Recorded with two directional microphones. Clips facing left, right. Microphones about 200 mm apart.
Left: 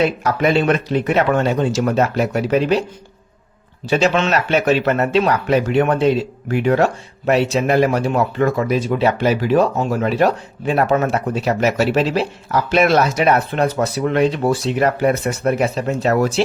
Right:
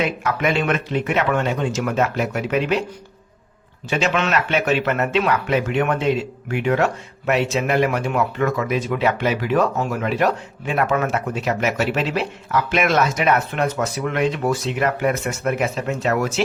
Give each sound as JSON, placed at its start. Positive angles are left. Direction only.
{"t": 0.0, "sound": "speech", "side_deg": 35}
{"t": 3.8, "sound": "speech", "side_deg": 35}